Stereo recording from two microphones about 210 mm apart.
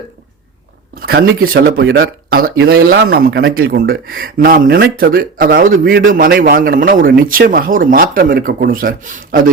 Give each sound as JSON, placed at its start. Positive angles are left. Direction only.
{"t": 1.0, "sound": "speech", "side_deg": -45}